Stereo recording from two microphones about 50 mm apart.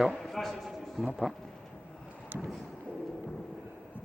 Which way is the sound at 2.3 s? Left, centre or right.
Right.